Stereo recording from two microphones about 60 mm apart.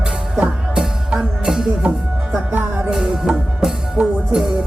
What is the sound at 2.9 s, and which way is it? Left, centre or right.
Music, centre.